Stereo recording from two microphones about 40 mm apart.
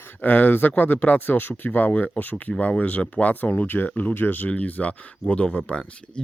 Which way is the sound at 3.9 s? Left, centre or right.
Left.